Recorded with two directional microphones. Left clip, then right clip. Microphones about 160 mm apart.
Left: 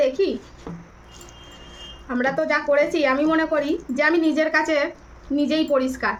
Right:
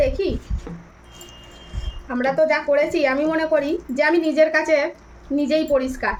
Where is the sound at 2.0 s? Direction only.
20° left (ahead or behind).